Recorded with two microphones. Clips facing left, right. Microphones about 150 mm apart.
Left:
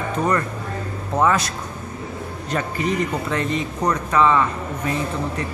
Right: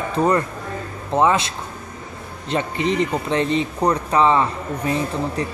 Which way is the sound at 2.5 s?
25° right (ahead or behind).